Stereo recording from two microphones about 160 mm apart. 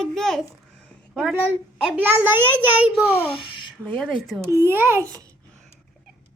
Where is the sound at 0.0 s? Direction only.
Centre (ahead or behind).